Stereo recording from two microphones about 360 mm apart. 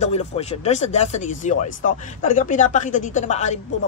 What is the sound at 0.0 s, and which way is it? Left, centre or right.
Speech, centre.